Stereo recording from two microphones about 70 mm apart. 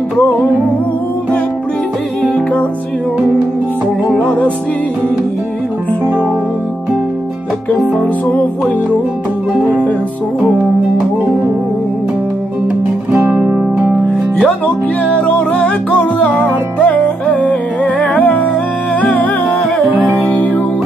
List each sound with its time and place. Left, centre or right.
13.4 s music: right
15.0 s music: centre
20.2 s music: left